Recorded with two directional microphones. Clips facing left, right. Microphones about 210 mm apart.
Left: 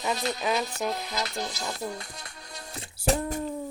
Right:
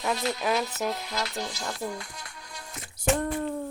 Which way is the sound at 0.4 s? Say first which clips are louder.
Even; centre (ahead or behind).